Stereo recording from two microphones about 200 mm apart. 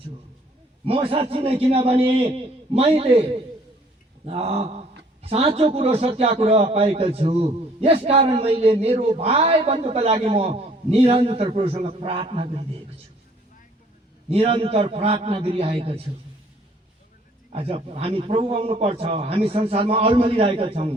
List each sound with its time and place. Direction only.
0.9 s a man's voice: 25° right (ahead or behind)
14.3 s a man's voice: 30° right (ahead or behind)
17.5 s a man's voice: 30° right (ahead or behind)